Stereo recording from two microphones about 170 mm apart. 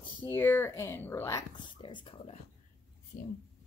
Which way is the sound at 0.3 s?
10° left (ahead or behind).